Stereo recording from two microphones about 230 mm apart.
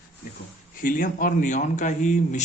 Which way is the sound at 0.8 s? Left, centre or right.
Left.